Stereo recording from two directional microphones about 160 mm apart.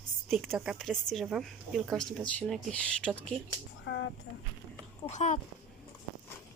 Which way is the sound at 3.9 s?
90° left.